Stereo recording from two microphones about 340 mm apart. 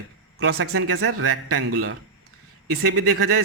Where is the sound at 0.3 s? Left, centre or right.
Right.